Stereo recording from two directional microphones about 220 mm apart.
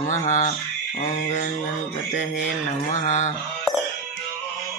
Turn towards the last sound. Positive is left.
turn(degrees=35)  # may be behind; listen again after turning